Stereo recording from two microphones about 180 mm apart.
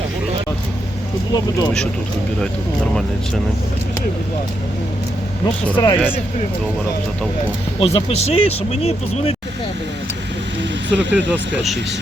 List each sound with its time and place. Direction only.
1.3 s speech: 20° left (ahead or behind)
5.7 s speech: 30° left (ahead or behind)
7.8 s speech: 35° left (ahead or behind)
10.6 s vehicle: 85° right